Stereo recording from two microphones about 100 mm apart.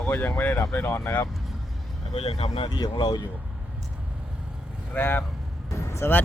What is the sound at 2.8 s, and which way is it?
Speech, 45° left (ahead or behind).